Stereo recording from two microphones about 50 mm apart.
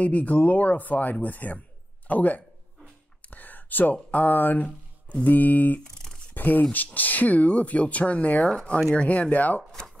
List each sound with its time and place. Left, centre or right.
0.0 s speech: left
5.9 s computer keyboard: centre
6.3 s speech: left